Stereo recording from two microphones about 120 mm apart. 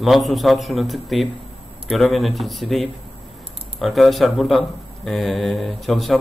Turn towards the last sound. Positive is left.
turn(degrees=0)  # may be behind; listen again after turning